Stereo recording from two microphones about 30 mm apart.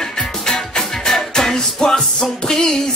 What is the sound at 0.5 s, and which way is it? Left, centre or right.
Music, left.